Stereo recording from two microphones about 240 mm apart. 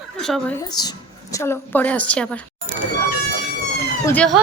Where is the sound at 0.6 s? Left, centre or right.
Centre.